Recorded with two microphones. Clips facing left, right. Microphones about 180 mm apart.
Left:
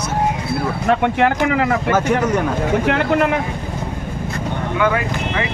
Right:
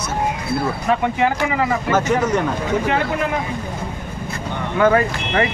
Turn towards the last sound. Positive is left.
turn(degrees=-40)  # may be behind; listen again after turning